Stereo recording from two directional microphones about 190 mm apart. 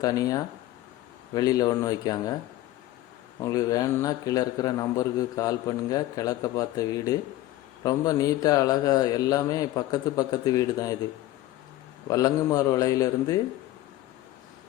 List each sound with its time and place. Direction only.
0.0 s a man's voice: 20° left (ahead or behind)
3.4 s a man's voice: 20° left (ahead or behind)
12.0 s a man's voice: 20° left (ahead or behind)